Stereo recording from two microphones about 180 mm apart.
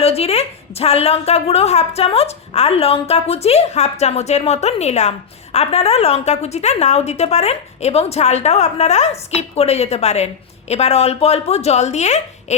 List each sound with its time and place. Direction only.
0.0 s a woman's voice: 35° left (ahead or behind)